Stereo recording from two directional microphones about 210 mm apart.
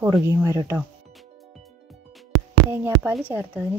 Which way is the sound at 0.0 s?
10° right (ahead or behind).